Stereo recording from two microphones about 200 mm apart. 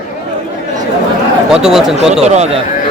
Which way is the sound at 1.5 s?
5° right (ahead or behind).